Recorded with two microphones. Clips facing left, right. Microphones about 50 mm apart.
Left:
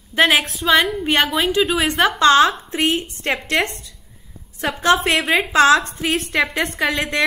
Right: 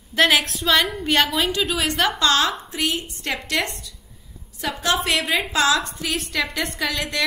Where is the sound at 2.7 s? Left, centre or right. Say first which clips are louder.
Left 5 dB; left.